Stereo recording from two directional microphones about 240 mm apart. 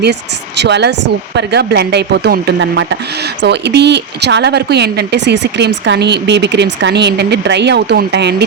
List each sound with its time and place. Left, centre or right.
0.0 s speech: right